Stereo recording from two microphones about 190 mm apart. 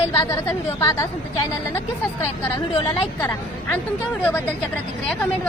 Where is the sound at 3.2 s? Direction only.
10° left (ahead or behind).